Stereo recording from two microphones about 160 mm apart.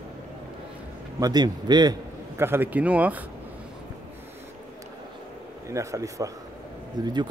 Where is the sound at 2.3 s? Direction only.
15° right (ahead or behind).